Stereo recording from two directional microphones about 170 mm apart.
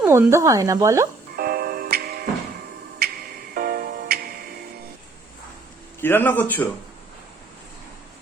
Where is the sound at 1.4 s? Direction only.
60° right (ahead or behind).